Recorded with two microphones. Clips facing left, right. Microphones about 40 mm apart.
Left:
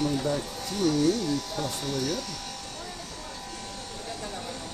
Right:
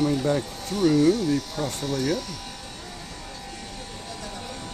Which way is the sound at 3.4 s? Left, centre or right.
Centre.